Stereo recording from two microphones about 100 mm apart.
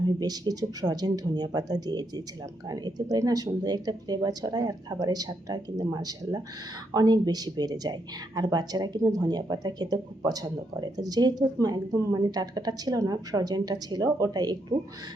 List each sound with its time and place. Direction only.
0.2 s speech: 40° right (ahead or behind)